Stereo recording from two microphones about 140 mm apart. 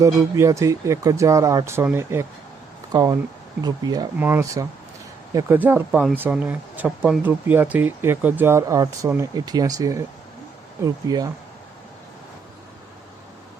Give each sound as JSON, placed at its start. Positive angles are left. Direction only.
{"t": 0.0, "sound": "speech", "side_deg": -20}
{"t": 5.5, "sound": "speech", "side_deg": -10}